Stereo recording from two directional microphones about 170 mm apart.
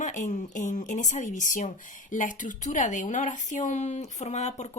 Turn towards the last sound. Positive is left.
turn(degrees=40)  # may be behind; listen again after turning